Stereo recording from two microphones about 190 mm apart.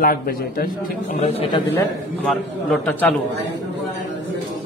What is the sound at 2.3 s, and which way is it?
Speech, 5° left (ahead or behind).